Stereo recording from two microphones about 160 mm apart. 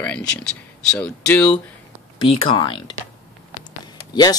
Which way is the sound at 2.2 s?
30° left (ahead or behind).